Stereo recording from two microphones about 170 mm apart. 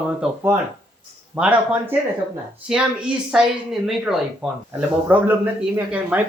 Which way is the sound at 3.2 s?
5° right (ahead or behind).